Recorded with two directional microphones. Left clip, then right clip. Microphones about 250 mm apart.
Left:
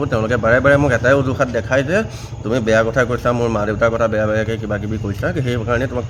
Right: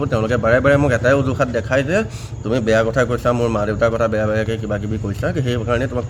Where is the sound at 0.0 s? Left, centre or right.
Centre.